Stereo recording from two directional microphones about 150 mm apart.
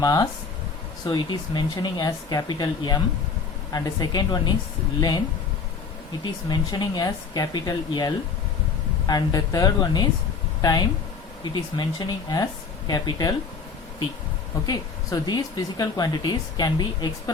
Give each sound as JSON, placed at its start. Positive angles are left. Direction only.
{"t": 0.0, "sound": "speech", "side_deg": 25}
{"t": 6.5, "sound": "speech", "side_deg": 30}
{"t": 14.7, "sound": "speech", "side_deg": 25}